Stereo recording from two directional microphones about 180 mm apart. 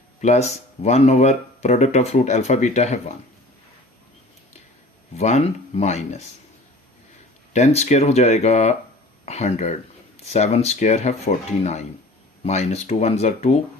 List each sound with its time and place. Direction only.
0.2 s speech: 40° left (ahead or behind)
5.1 s speech: 40° left (ahead or behind)
7.5 s speech: 40° left (ahead or behind)